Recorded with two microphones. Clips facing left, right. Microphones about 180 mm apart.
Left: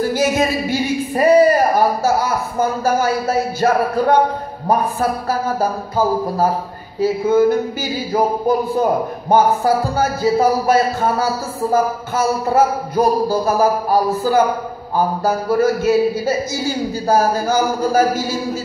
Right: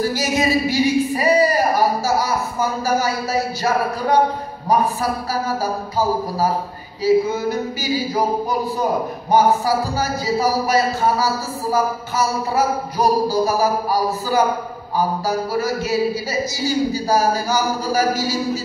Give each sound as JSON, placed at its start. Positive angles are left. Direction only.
{"t": 0.0, "sound": "a man's voice", "side_deg": 55}